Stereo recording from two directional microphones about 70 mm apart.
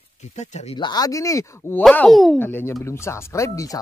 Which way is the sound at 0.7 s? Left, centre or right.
Left.